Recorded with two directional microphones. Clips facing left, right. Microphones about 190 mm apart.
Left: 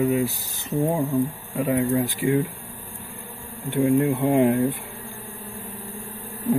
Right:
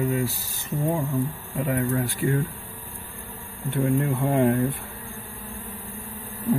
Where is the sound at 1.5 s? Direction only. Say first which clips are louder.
Left 4 dB; 15° left (ahead or behind).